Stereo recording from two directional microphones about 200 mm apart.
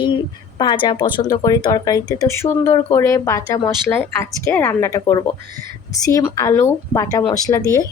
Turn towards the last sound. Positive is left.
turn(degrees=15)  # may be behind; listen again after turning